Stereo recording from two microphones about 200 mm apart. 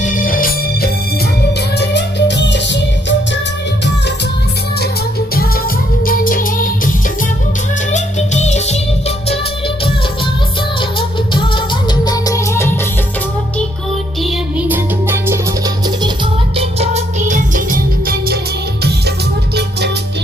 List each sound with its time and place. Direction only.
0.0 s music: 40° left (ahead or behind)
1.8 s music: 60° left (ahead or behind)
6.1 s music: 45° left (ahead or behind)
11.3 s music: 25° left (ahead or behind)
14.2 s music: centre (ahead or behind)
15.0 s music: 10° right (ahead or behind)
16.6 s music: 30° right (ahead or behind)